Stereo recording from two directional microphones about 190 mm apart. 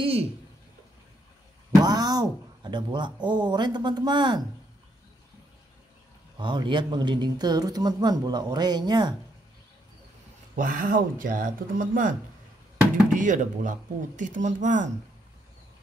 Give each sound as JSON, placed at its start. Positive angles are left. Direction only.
{"t": 0.0, "sound": "a sound", "side_deg": -30}
{"t": 1.8, "sound": "speech", "side_deg": -20}
{"t": 6.3, "sound": "speech", "side_deg": -25}
{"t": 10.5, "sound": "speech", "side_deg": -45}